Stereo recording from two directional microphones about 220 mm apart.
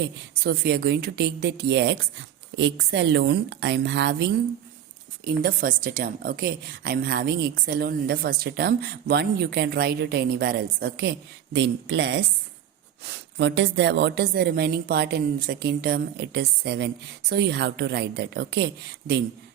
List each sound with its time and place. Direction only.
0.0 s a woman's voice: 45° right (ahead or behind)
5.2 s a woman's voice: 40° right (ahead or behind)